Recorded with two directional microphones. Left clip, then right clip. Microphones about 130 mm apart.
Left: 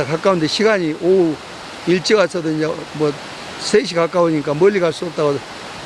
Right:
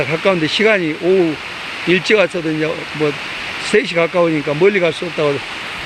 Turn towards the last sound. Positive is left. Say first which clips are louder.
# right 1 dB
turn(degrees=10)  # may be behind; listen again after turning